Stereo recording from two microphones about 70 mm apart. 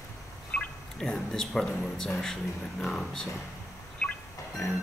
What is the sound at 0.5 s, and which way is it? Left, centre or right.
Speech, centre.